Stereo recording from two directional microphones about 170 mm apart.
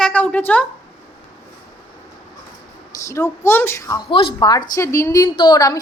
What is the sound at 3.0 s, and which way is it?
Speech, 15° left (ahead or behind).